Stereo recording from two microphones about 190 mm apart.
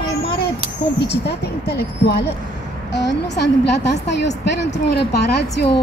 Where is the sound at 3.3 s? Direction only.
60° left (ahead or behind).